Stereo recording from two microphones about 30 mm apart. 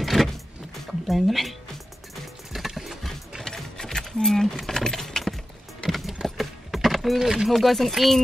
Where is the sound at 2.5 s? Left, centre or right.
Centre.